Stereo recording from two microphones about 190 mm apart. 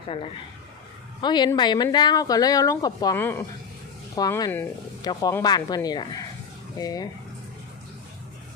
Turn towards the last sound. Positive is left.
turn(degrees=20)  # may be behind; listen again after turning